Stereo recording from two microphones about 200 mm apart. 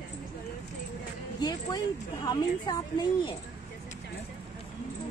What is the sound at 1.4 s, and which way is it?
A woman's voice, 20° left (ahead or behind).